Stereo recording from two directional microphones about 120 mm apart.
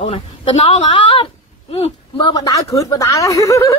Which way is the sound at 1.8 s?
45° left (ahead or behind).